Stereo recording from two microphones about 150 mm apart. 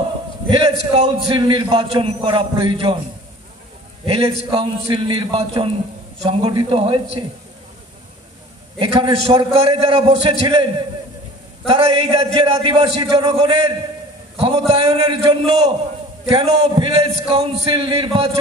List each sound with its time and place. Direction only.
0.5 s a man's voice: 35° right (ahead or behind)
4.0 s a man's voice: 40° right (ahead or behind)
8.7 s a man's voice: 35° right (ahead or behind)
12.8 s a man's voice: 25° right (ahead or behind)
14.7 s a man's voice: 40° right (ahead or behind)